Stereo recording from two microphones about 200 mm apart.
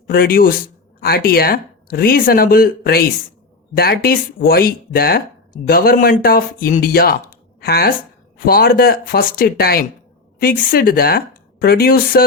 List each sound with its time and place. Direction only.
0.1 s speech: 45° left (ahead or behind)